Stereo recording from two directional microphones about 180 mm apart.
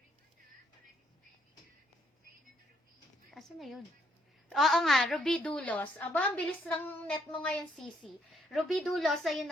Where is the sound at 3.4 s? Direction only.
Centre (ahead or behind).